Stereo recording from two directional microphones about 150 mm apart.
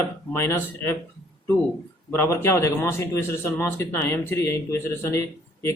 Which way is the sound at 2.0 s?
15° left (ahead or behind).